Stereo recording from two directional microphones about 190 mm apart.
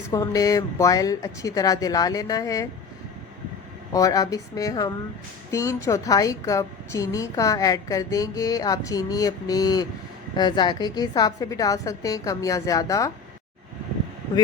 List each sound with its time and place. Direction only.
0.1 s a woman's voice: 20° left (ahead or behind)
3.9 s a woman's voice: 20° left (ahead or behind)